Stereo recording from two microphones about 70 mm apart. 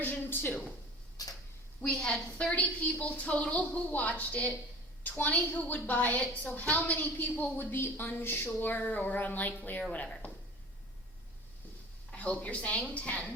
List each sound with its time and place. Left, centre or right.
0.0 s a woman's voice: left
1.2 s tick-tock: left
1.9 s a woman's voice: centre
12.1 s a woman's voice: left